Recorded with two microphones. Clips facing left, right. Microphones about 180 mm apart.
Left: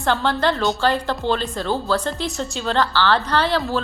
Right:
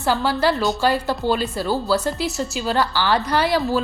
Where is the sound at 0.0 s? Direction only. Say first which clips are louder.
Even; 5° right (ahead or behind).